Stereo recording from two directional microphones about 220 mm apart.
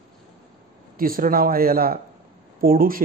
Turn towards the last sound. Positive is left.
turn(degrees=-40)  # may be behind; listen again after turning